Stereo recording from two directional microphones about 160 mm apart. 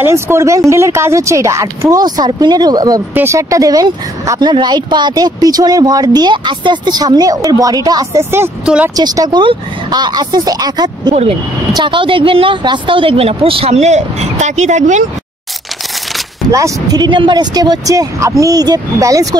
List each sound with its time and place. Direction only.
0.0 s speech: 15° right (ahead or behind)
8.9 s a woman's voice: 25° right (ahead or behind); by 15.0 s 50° right (ahead or behind)
16.4 s speech: 20° right (ahead or behind)